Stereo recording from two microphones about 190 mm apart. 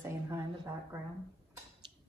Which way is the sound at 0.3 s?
15° right (ahead or behind).